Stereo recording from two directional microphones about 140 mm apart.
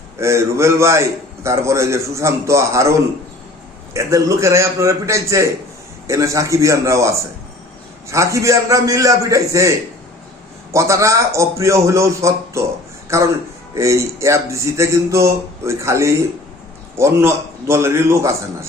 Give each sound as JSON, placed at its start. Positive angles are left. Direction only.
{"t": 0.2, "sound": "a man's voice", "side_deg": -20}
{"t": 3.9, "sound": "a man's voice", "side_deg": -20}